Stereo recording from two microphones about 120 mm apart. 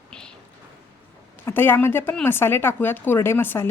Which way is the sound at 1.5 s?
20° left (ahead or behind).